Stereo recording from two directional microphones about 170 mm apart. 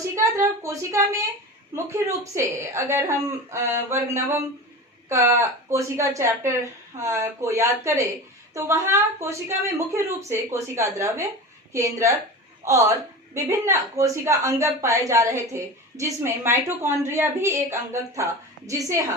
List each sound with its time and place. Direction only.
0.2 s a woman's voice: 15° right (ahead or behind)